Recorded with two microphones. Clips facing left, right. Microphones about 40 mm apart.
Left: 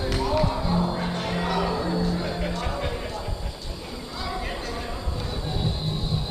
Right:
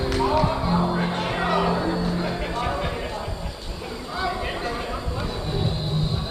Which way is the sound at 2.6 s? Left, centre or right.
Centre.